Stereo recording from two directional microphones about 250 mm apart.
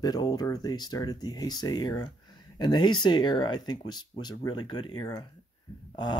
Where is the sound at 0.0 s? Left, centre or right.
Centre.